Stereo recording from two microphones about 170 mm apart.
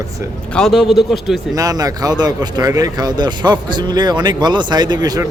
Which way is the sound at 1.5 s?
20° right (ahead or behind).